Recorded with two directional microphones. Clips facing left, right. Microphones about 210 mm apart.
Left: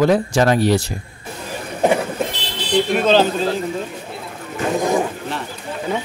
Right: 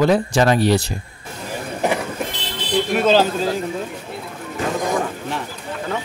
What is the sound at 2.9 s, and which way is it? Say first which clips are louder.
Speech: even; 5° right (ahead or behind).